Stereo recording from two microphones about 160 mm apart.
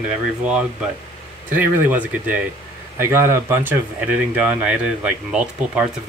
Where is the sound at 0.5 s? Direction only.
5° right (ahead or behind).